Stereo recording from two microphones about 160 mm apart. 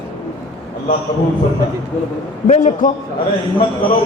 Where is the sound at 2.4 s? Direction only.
55° left (ahead or behind).